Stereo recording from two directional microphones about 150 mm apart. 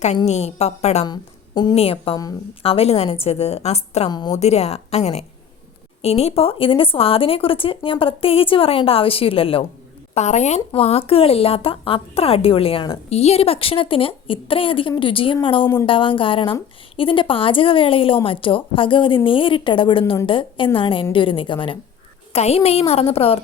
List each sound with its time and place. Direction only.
0.3 s a woman's voice: 45° left (ahead or behind)
1.0 s a woman's voice: 30° left (ahead or behind)
1.7 s a woman's voice: 40° left (ahead or behind)
4.1 s a woman's voice: 30° left (ahead or behind)
4.4 s a woman's voice: 45° left (ahead or behind)
10.2 s a woman's voice: 50° left (ahead or behind)
15.6 s speech: 15° left (ahead or behind)
15.9 s a woman's voice: 35° left (ahead or behind)
22.3 s a woman's voice: 45° left (ahead or behind)